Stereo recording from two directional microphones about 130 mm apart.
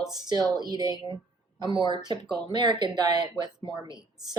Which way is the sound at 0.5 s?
35° right (ahead or behind).